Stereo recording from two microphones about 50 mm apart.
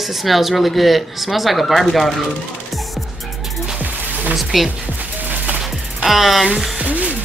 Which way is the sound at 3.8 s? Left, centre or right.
Right.